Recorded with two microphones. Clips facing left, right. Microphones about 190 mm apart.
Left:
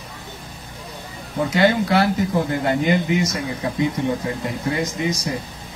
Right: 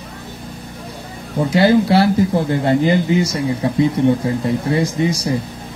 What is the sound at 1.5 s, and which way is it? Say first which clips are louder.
Speech: right 5 dB; 30° right (ahead or behind).